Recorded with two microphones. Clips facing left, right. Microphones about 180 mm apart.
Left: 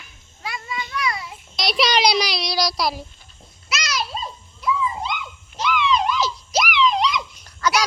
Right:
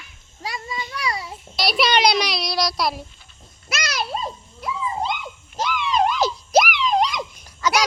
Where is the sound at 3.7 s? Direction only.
55° right (ahead or behind).